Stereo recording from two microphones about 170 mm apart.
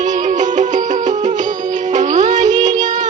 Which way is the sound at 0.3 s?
45° right (ahead or behind).